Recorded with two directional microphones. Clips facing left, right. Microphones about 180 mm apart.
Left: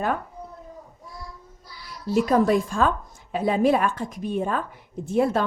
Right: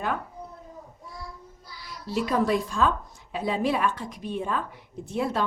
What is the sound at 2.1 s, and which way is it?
A woman's voice, 45° left (ahead or behind).